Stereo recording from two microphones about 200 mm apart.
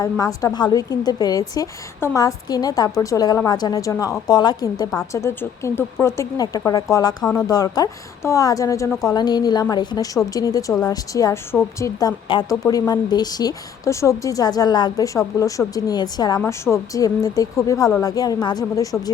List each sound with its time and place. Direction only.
0.0 s a woman's voice: 15° left (ahead or behind)